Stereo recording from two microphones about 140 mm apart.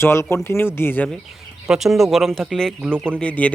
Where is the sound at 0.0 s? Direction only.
20° left (ahead or behind).